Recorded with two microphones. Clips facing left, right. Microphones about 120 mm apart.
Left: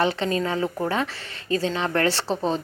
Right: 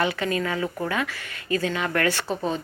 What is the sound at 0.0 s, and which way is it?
A woman's voice, 30° left (ahead or behind).